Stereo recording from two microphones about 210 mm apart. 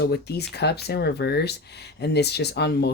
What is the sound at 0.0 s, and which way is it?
Speech, 50° left (ahead or behind).